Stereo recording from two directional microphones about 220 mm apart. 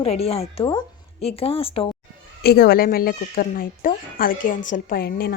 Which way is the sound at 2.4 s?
45° left (ahead or behind).